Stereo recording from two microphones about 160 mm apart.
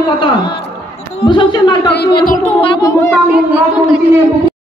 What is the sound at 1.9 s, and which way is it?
Speech, 90° left.